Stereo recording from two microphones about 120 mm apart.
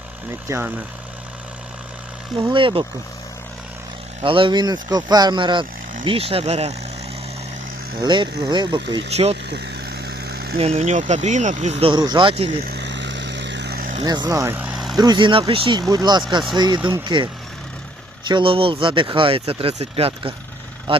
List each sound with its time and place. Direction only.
0.4 s speech: 20° right (ahead or behind)
2.3 s speech: 45° right (ahead or behind)
4.2 s speech: 45° right (ahead or behind)
6.1 s speech: 55° right (ahead or behind)
7.9 s speech: 40° right (ahead or behind)
9.0 s speech: 60° right (ahead or behind)
10.6 s speech: 60° right (ahead or behind)
11.9 s speech: 40° right (ahead or behind)
14.0 s speech: 35° right (ahead or behind); by 14.8 s 15° right (ahead or behind)
14.9 s speech: 35° right (ahead or behind)
15.9 s speech: 35° right (ahead or behind)
18.3 s speech: 45° right (ahead or behind)